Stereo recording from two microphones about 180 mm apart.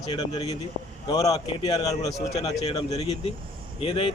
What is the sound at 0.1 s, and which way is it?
A man's voice, 25° left (ahead or behind).